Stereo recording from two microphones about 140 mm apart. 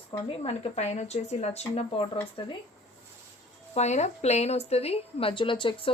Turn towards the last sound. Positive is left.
turn(degrees=40)  # may be behind; listen again after turning